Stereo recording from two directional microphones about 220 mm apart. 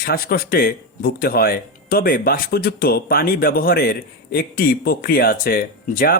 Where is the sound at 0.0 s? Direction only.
40° left (ahead or behind).